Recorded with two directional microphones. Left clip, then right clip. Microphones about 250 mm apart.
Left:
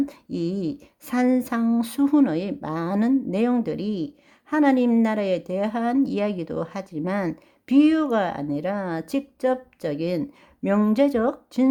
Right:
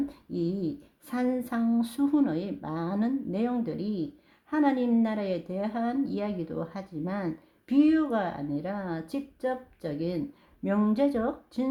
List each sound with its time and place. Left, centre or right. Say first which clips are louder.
0.1 s a woman's voice: left 4 dB; left